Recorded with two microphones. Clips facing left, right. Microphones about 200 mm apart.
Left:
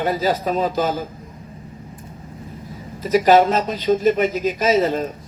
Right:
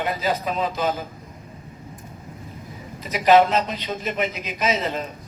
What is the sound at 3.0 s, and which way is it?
A man's voice, 45° left (ahead or behind).